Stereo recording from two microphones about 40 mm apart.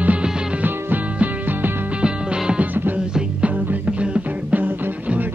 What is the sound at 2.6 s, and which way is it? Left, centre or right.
Music, right.